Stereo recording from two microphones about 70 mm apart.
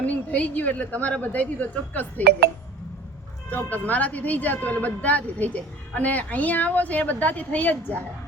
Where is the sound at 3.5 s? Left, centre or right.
Left.